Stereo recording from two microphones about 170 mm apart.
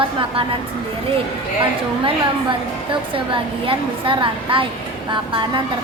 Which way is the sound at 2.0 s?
30° right (ahead or behind).